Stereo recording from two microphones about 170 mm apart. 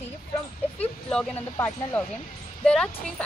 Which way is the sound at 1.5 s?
10° left (ahead or behind).